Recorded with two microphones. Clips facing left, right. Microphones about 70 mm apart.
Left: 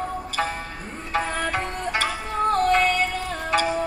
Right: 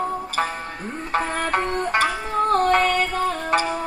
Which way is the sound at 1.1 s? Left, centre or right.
Right.